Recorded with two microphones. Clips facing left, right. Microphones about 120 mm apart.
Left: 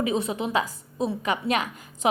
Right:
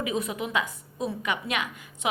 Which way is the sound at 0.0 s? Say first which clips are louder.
Left 4 dB; 30° left (ahead or behind).